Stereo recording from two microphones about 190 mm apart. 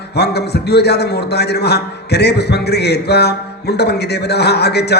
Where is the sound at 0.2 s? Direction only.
60° left (ahead or behind).